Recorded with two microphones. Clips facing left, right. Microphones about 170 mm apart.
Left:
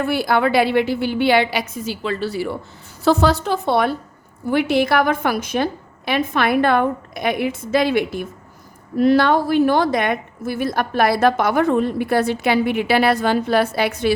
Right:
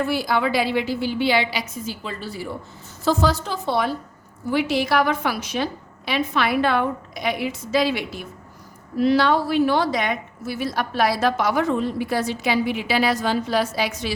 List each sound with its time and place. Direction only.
0.0 s a woman's voice: 60° left (ahead or behind); by 2.5 s 80° left
3.0 s a woman's voice: 65° left (ahead or behind)